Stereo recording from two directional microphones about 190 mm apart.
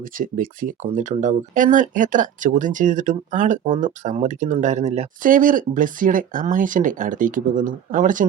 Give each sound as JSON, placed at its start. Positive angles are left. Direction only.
{"t": 0.2, "sound": "speech", "side_deg": -45}